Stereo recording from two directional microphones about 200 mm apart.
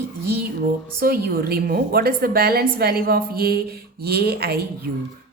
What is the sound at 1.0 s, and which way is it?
A woman's voice, 50° right (ahead or behind).